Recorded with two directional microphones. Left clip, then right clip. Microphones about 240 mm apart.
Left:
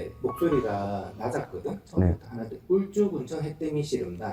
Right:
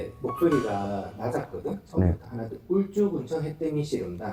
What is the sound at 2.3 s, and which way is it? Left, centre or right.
Speech, centre.